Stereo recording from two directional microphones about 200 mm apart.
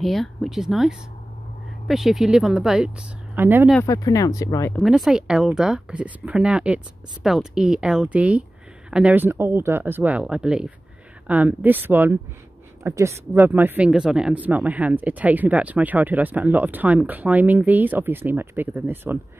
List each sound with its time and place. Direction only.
0.0 s speech: centre (ahead or behind)
3.8 s speech: 15° left (ahead or behind)
4.7 s speech: centre (ahead or behind)